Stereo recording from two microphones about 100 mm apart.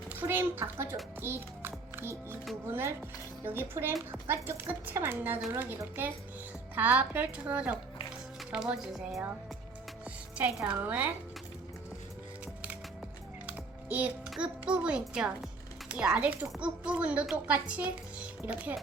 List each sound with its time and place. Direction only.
0.1 s speech: 20° right (ahead or behind)
1.2 s music: 25° right (ahead or behind)
2.6 s a child's voice: 25° right (ahead or behind); by 9.2 s 5° right (ahead or behind)
10.3 s a child's voice: 15° right (ahead or behind)
13.5 s music: 15° right (ahead or behind)
14.3 s a child's voice: 10° right (ahead or behind)